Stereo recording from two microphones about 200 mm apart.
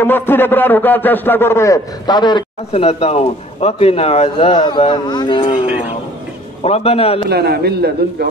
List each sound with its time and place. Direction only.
0.0 s a man's voice: 10° left (ahead or behind)
6.6 s a man's voice: 30° left (ahead or behind)
7.2 s a man's voice: 55° right (ahead or behind)